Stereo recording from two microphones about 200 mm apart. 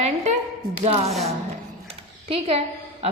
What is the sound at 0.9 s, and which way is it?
Speech, 30° right (ahead or behind).